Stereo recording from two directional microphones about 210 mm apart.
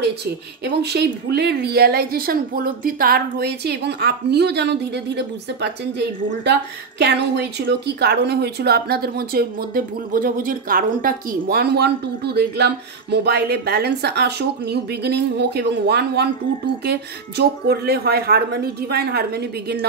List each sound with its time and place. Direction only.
0.0 s speech: 50° right (ahead or behind)